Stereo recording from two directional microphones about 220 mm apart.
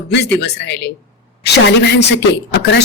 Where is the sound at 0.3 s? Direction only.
50° left (ahead or behind).